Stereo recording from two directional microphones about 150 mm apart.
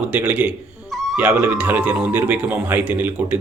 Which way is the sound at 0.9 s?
Centre (ahead or behind).